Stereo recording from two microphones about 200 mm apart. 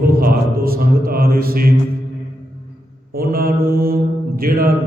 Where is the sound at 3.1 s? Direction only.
45° right (ahead or behind).